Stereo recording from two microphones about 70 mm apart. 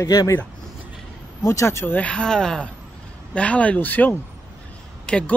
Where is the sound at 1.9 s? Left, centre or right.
Centre.